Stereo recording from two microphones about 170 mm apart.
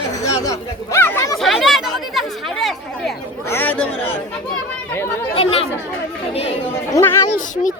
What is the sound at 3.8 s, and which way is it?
Speech, 35° left (ahead or behind).